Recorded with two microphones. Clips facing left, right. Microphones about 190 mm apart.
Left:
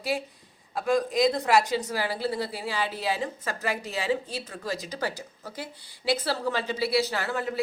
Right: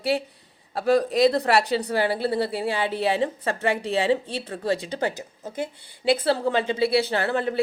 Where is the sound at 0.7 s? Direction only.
35° right (ahead or behind).